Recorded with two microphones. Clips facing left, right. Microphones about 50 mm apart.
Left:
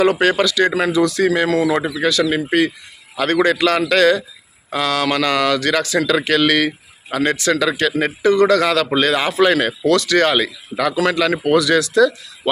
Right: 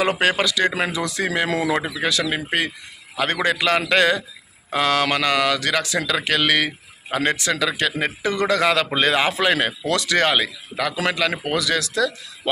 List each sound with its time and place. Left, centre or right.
0.2 s a man's voice: centre; by 5.1 s right
5.1 s a man's voice: centre